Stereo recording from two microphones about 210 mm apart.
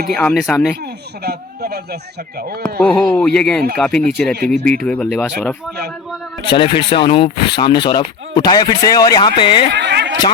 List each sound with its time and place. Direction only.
0.1 s speech: 5° left (ahead or behind)
1.2 s a man's voice: 50° right (ahead or behind)
2.6 s speech: 5° left (ahead or behind)
6.6 s speech: 25° left (ahead or behind)
9.7 s speech: 55° right (ahead or behind)